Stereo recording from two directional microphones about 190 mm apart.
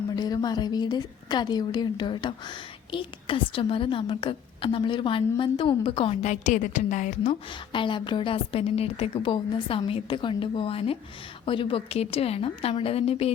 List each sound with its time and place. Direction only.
0.2 s a woman's voice: 20° left (ahead or behind); by 7.3 s 40° left (ahead or behind)
7.7 s a woman's voice: 25° left (ahead or behind)